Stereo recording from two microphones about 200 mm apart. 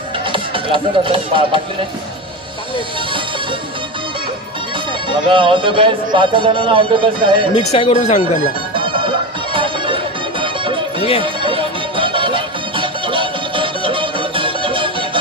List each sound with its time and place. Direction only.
0.3 s speech: 25° right (ahead or behind)
5.3 s speech: 25° right (ahead or behind)
7.5 s speech: 30° left (ahead or behind)
8.7 s music: 25° right (ahead or behind)